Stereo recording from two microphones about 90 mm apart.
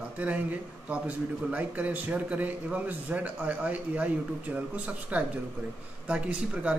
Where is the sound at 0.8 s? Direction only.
15° right (ahead or behind).